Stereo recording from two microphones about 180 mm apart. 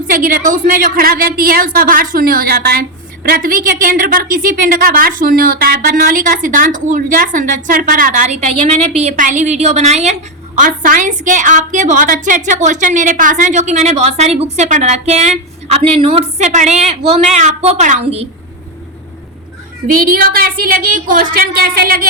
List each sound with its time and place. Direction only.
0.1 s a woman's voice: 50° right (ahead or behind)
20.1 s a woman's voice: 50° right (ahead or behind)